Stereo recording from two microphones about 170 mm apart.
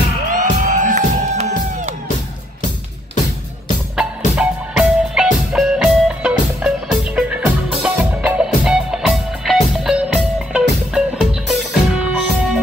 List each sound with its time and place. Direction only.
0.3 s music: 50° right (ahead or behind)
4.4 s music: 5° right (ahead or behind)